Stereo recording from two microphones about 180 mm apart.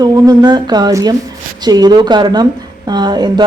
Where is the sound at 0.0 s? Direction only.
20° right (ahead or behind).